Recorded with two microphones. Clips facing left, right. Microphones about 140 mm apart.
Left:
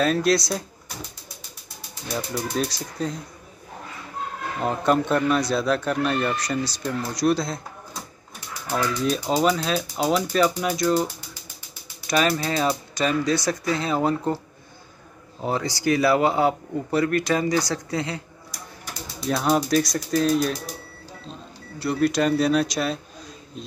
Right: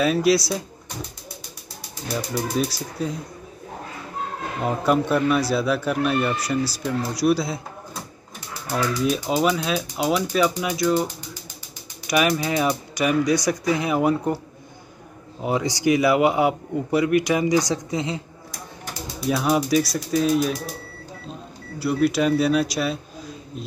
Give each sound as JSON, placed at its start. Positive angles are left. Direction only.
{"t": 0.0, "sound": "speech", "side_deg": -5}
{"t": 2.1, "sound": "speech", "side_deg": -5}
{"t": 4.6, "sound": "speech", "side_deg": -5}
{"t": 9.3, "sound": "speech", "side_deg": -10}
{"t": 12.1, "sound": "speech", "side_deg": -15}
{"t": 15.4, "sound": "speech", "side_deg": -15}
{"t": 19.1, "sound": "bird", "side_deg": -5}
{"t": 19.5, "sound": "speech", "side_deg": -5}